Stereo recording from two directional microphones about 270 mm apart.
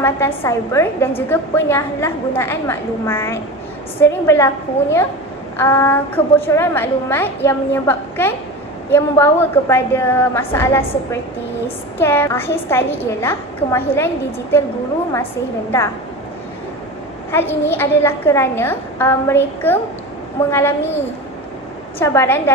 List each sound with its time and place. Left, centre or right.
0.0 s a woman's voice: centre
5.6 s a woman's voice: centre
17.3 s a woman's voice: centre